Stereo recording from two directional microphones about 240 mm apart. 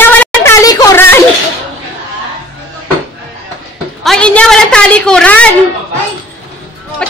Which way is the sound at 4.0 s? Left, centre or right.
Centre.